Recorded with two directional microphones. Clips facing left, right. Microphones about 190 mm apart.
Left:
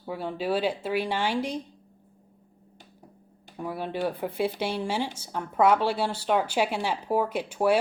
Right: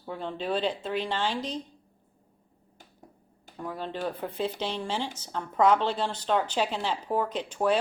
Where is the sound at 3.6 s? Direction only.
10° left (ahead or behind).